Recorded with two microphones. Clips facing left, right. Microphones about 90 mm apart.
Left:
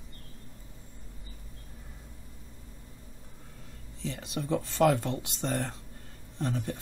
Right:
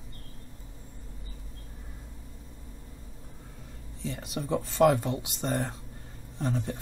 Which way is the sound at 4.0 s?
5° right (ahead or behind).